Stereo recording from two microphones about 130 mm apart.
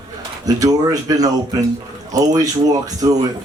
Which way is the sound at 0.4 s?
25° right (ahead or behind).